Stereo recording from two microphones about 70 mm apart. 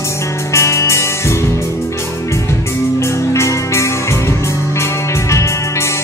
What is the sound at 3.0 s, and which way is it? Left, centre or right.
Music, left.